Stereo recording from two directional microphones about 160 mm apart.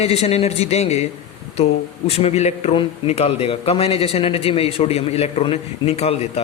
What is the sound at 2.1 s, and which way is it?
Speech, 40° left (ahead or behind).